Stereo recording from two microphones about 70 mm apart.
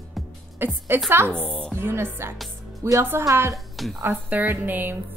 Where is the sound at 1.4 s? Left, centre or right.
Centre.